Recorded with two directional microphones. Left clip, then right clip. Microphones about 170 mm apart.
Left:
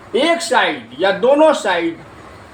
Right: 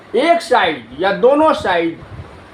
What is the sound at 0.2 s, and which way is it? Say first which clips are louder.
A man's voice: right 2 dB; 35° right (ahead or behind).